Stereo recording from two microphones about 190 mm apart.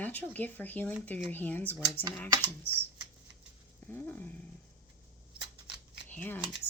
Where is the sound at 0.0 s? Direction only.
10° left (ahead or behind).